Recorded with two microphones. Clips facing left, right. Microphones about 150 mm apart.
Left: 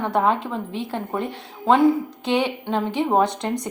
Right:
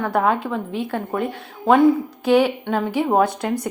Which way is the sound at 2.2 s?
5° right (ahead or behind).